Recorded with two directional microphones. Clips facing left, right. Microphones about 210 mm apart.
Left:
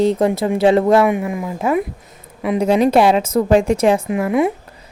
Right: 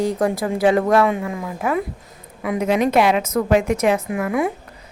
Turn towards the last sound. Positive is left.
turn(degrees=25)  # may be behind; listen again after turning